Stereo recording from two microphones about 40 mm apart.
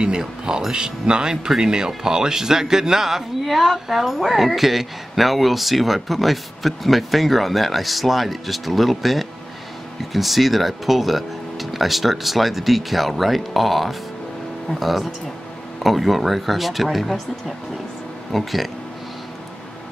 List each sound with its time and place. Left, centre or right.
0.0 s speech: centre
18.3 s speech: centre